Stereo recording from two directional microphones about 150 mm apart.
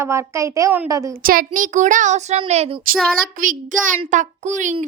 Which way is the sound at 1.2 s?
70° right (ahead or behind).